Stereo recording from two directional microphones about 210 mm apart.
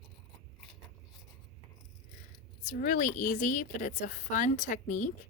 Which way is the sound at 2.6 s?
40° left (ahead or behind).